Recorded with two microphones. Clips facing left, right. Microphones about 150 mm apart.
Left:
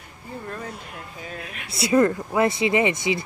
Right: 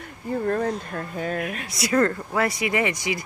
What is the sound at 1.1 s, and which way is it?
Speech, 50° right (ahead or behind).